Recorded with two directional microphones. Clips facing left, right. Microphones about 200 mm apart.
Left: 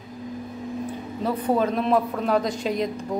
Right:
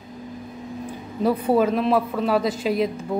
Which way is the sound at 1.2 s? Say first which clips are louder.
Right 4 dB; 10° right (ahead or behind).